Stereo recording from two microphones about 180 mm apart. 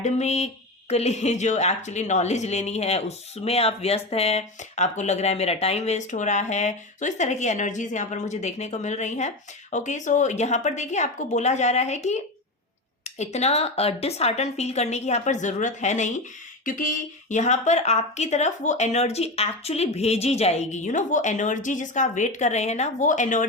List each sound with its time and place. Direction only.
0.0 s speech: 40° left (ahead or behind)